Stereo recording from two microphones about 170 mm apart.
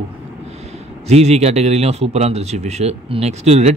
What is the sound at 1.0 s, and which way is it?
Speech, 40° right (ahead or behind).